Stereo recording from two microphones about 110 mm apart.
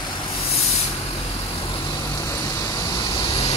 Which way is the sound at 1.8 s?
30° left (ahead or behind).